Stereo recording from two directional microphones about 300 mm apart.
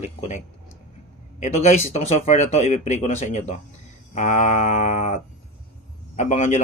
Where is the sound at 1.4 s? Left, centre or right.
Left.